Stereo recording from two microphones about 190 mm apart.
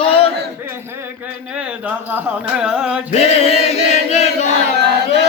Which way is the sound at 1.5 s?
5° right (ahead or behind).